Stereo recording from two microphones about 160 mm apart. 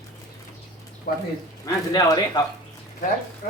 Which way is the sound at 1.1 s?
75° left (ahead or behind).